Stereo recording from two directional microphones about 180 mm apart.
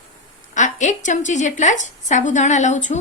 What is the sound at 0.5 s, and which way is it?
A woman's voice, 40° left (ahead or behind).